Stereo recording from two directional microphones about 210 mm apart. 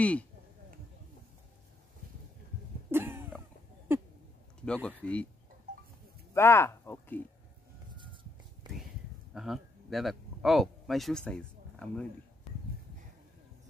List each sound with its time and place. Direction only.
0.0 s speech: 5° left (ahead or behind)
2.9 s cough: 10° right (ahead or behind)
3.9 s a sound: 10° right (ahead or behind)
4.8 s speech: 5° left (ahead or behind)
6.3 s speech: 10° left (ahead or behind)
8.0 s a sound: 25° right (ahead or behind)
8.6 s whispering: 20° right (ahead or behind)
9.3 s speech: centre (ahead or behind)